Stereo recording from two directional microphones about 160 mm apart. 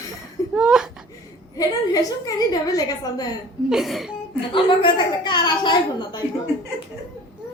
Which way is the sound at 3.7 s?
Centre (ahead or behind).